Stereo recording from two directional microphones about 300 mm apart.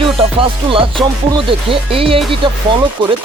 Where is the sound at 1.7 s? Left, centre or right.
Centre.